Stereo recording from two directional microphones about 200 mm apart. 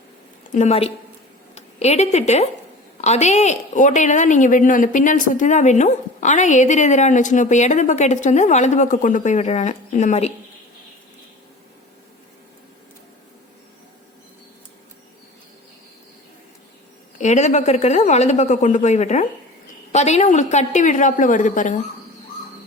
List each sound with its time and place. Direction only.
0.5 s a woman's voice: 35° left (ahead or behind)
17.2 s a woman's voice: 35° left (ahead or behind)